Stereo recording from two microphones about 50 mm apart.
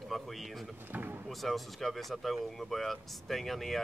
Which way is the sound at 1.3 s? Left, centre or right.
Centre.